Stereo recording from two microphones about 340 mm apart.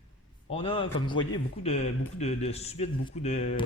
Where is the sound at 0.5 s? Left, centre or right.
Centre.